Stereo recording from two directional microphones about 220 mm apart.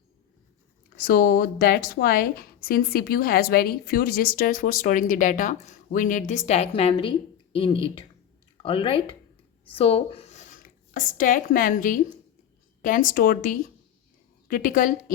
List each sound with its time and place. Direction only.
0.9 s a woman's voice: 45° left (ahead or behind)